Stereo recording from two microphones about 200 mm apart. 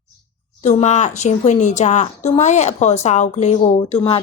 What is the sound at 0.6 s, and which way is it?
A woman's voice, 35° left (ahead or behind).